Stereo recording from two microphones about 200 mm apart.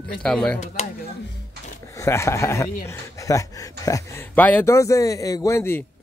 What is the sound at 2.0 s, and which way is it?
Speech, 15° left (ahead or behind).